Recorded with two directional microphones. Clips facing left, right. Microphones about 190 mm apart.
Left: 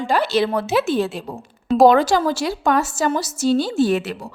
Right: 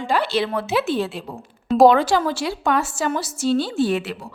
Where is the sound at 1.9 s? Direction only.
40° left (ahead or behind).